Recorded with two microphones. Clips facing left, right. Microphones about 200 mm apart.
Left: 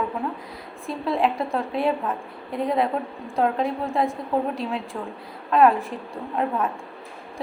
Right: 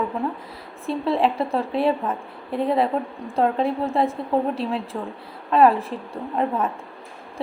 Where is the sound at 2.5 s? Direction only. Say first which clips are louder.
Right 3 dB; 30° right (ahead or behind).